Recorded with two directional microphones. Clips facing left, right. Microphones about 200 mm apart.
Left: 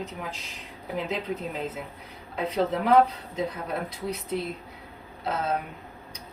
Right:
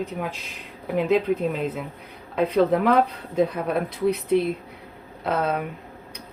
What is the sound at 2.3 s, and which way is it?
Speech, 55° right (ahead or behind).